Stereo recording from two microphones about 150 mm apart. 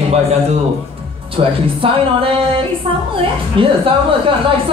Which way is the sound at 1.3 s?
35° right (ahead or behind).